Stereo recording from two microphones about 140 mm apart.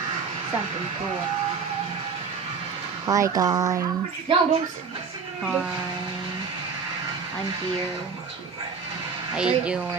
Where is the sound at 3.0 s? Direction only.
25° right (ahead or behind).